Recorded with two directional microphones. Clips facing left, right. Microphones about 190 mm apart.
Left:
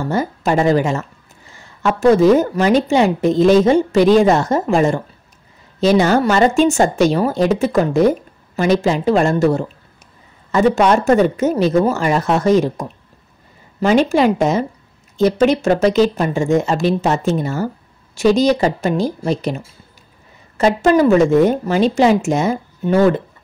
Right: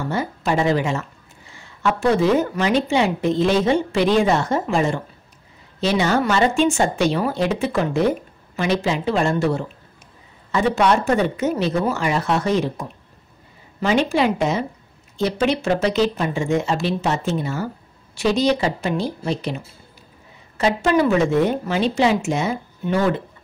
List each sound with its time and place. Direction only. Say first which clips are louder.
0.1 s a woman's voice: left 5 dB; 45° left (ahead or behind)
20.5 s a woman's voice: left 5 dB; 45° left (ahead or behind)